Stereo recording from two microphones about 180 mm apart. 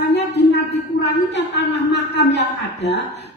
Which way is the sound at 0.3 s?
70° left (ahead or behind).